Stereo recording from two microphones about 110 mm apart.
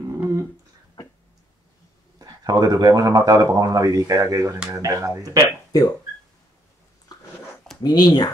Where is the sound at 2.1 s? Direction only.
30° right (ahead or behind).